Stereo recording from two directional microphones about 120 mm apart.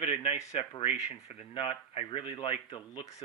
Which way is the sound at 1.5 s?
45° left (ahead or behind).